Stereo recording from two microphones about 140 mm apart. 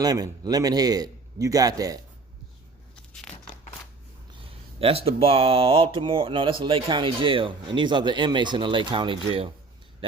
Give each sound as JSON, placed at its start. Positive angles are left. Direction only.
{"t": 0.0, "sound": "a man's voice", "side_deg": -25}
{"t": 3.1, "sound": "a sound", "side_deg": 5}
{"t": 4.8, "sound": "speech", "side_deg": -45}